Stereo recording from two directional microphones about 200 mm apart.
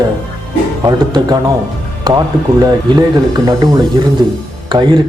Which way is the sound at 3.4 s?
15° right (ahead or behind).